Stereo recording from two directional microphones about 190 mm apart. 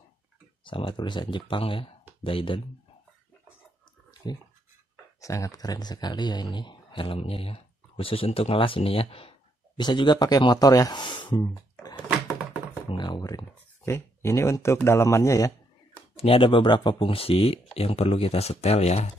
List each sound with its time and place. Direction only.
0.7 s speech: 25° left (ahead or behind)
4.2 s speech: 20° left (ahead or behind)
12.9 s speech: 25° left (ahead or behind)
16.2 s speech: 30° left (ahead or behind)